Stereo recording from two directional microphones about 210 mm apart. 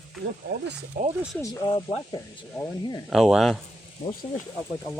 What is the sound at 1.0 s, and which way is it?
Speech, 45° right (ahead or behind).